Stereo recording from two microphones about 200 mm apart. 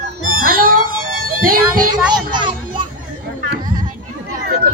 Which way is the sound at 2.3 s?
25° right (ahead or behind).